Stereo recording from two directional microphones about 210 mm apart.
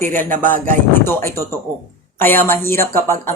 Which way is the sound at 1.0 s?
10° left (ahead or behind).